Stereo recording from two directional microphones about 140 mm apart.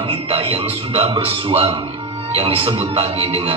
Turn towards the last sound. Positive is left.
turn(degrees=-45)  # may be behind; listen again after turning